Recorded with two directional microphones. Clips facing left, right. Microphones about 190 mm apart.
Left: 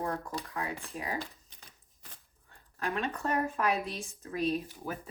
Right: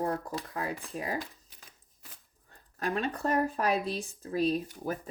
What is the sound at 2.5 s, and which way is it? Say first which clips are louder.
Speech: right 2 dB; 35° right (ahead or behind).